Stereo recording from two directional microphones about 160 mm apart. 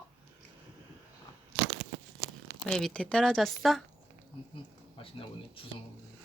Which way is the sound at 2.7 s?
5° left (ahead or behind).